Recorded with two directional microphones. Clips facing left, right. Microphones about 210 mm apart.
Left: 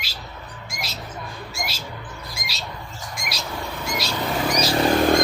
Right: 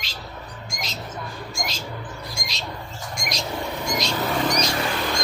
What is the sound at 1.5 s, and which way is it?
Bird, 5° left (ahead or behind).